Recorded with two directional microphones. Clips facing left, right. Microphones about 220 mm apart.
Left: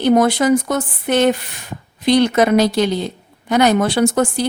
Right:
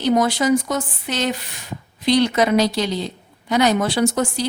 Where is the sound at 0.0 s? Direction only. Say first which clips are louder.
Left 4 dB; 55° left (ahead or behind).